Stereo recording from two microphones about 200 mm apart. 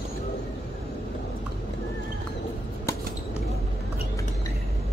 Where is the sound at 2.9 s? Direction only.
15° left (ahead or behind).